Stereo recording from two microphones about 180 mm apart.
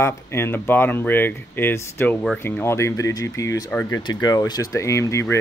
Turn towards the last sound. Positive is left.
turn(degrees=15)  # may be behind; listen again after turning